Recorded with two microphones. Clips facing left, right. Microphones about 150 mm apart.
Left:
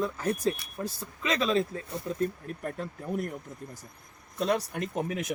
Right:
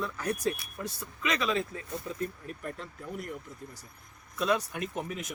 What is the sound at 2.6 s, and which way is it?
Speech, 50° left (ahead or behind).